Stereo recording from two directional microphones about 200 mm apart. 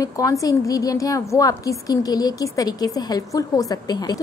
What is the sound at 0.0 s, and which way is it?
A woman's voice, 15° left (ahead or behind).